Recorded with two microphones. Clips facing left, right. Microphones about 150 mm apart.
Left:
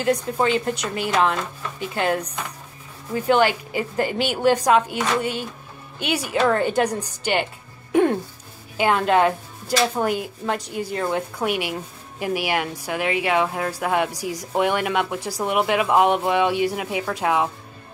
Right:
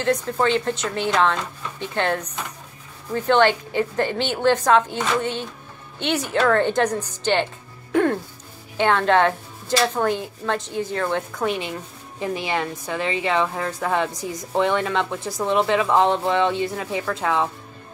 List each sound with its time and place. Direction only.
0.0 s a woman's voice: 10° left (ahead or behind)